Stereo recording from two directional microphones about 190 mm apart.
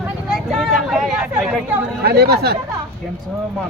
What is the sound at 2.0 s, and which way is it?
Speech, 55° right (ahead or behind).